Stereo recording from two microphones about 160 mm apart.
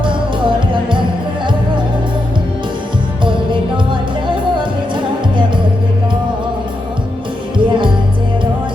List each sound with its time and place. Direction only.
0.0 s music: 30° right (ahead or behind)
7.6 s music: 30° right (ahead or behind)